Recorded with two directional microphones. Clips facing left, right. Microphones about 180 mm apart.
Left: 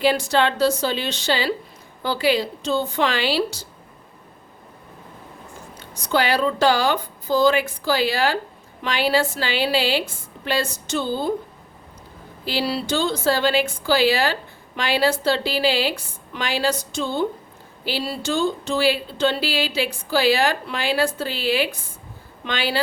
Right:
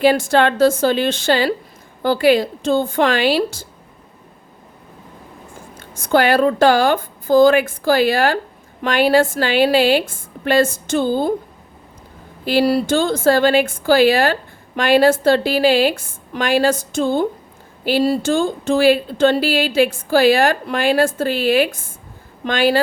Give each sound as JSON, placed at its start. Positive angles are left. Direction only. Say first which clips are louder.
{"t": 0.0, "sound": "speech", "louder": "right 5 dB", "side_deg": -50}
{"t": 5.9, "sound": "speech", "louder": "right 6 dB", "side_deg": -50}
{"t": 12.5, "sound": "speech", "louder": "right 8 dB", "side_deg": -50}